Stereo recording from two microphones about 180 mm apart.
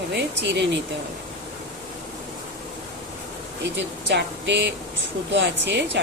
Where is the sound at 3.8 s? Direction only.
75° right (ahead or behind).